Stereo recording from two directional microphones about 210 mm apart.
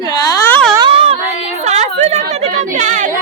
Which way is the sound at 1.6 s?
35° right (ahead or behind).